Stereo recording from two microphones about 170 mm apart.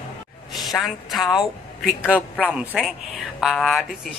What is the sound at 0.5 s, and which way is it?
A woman's voice, centre (ahead or behind).